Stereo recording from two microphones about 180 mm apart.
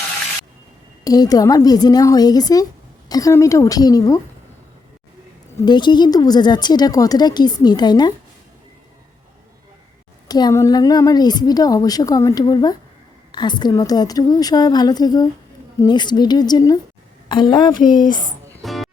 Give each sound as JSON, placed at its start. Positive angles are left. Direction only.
{"t": 1.0, "sound": "speech", "side_deg": 20}
{"t": 5.6, "sound": "speech", "side_deg": 25}
{"t": 10.2, "sound": "speech", "side_deg": 20}
{"t": 18.6, "sound": "music", "side_deg": 0}